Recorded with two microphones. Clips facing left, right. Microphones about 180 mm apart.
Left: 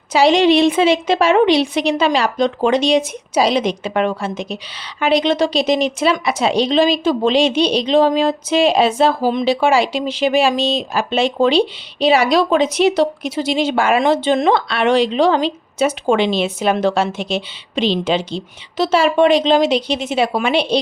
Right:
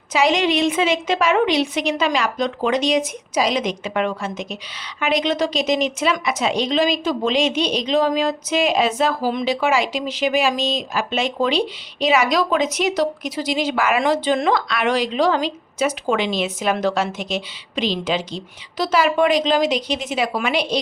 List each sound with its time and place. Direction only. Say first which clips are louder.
0.1 s a woman's voice: left 6 dB; 30° left (ahead or behind)